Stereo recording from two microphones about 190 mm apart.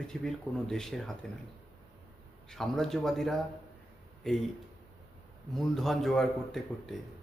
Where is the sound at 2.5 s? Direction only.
Centre (ahead or behind).